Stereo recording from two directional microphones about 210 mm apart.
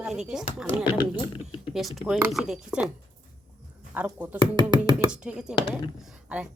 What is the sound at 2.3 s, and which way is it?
Speech, centre (ahead or behind).